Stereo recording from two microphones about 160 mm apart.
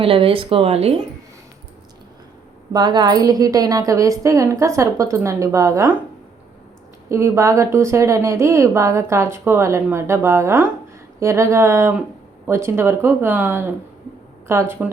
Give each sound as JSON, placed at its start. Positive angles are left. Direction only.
{"t": 0.0, "sound": "speech", "side_deg": -35}
{"t": 2.7, "sound": "a woman's voice", "side_deg": -25}
{"t": 7.1, "sound": "a woman's voice", "side_deg": -15}